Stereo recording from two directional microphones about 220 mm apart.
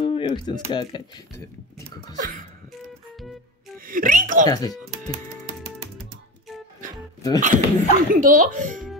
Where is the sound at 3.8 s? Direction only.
40° right (ahead or behind).